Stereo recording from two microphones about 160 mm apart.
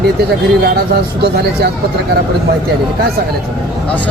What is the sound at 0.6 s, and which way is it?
Speech, 85° right.